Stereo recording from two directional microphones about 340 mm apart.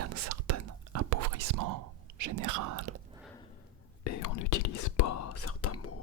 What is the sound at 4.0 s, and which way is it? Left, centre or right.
Whispering, left.